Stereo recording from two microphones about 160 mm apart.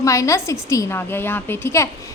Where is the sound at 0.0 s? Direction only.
20° left (ahead or behind).